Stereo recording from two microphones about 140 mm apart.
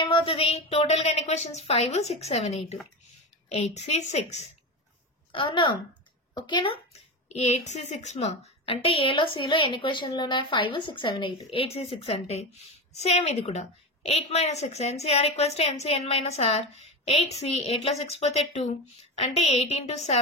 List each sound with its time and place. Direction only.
0.0 s a woman's voice: 40° left (ahead or behind)
5.3 s a woman's voice: 35° left (ahead or behind)
6.9 s speech: 50° left (ahead or behind)
8.6 s a woman's voice: 40° left (ahead or behind)
11.5 s a woman's voice: 45° left (ahead or behind)